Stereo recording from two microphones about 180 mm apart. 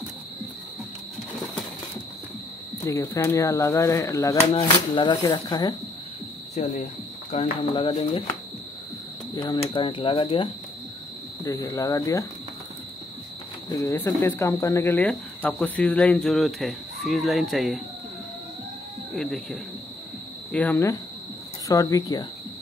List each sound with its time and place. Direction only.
2.8 s speech: 15° left (ahead or behind)
6.5 s cricket: 40° left (ahead or behind)
7.7 s speech: 30° left (ahead or behind)
9.3 s cricket: 25° left (ahead or behind)
11.4 s speech: 20° left (ahead or behind)
13.7 s speech: 15° left (ahead or behind); by 17.8 s centre (ahead or behind)
19.1 s speech: centre (ahead or behind)
21.6 s cricket: 20° left (ahead or behind)